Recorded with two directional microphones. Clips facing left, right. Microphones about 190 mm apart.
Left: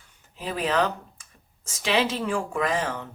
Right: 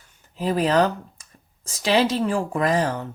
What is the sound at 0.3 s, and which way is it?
Speech, 40° right (ahead or behind).